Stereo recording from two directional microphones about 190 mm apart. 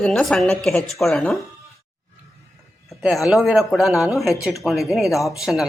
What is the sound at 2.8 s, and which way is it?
Speech, centre (ahead or behind).